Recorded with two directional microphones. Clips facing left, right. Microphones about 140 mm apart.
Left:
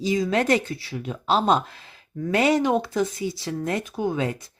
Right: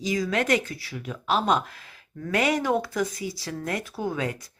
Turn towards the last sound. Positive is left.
turn(degrees=25)  # may be behind; listen again after turning